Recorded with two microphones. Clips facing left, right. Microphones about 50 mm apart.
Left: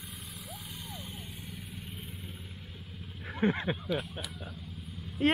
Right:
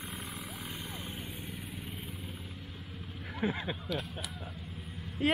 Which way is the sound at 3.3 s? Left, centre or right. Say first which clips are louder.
Left 4 dB; centre.